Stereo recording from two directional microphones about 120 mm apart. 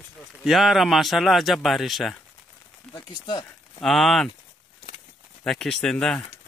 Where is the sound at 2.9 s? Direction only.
40° left (ahead or behind).